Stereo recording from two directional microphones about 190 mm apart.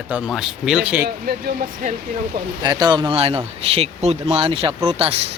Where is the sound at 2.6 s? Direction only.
20° right (ahead or behind).